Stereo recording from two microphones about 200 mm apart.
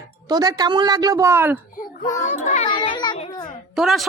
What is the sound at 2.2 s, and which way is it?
A child's voice, 35° left (ahead or behind).